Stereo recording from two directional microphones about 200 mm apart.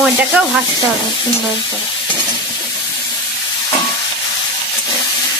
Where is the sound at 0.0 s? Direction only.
5° right (ahead or behind).